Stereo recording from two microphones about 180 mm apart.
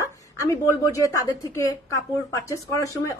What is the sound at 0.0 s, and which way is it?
A woman's voice, 20° left (ahead or behind).